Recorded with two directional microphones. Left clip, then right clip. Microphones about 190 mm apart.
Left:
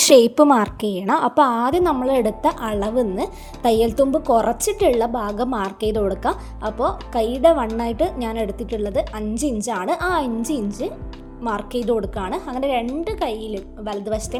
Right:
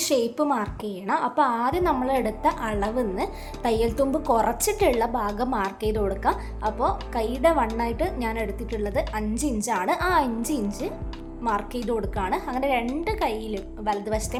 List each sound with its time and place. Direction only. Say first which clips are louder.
0.0 s a woman's voice: left 11 dB; 50° left (ahead or behind); by 14.3 s 15° left (ahead or behind)